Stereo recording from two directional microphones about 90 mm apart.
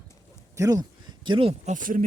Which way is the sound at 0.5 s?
40° right (ahead or behind).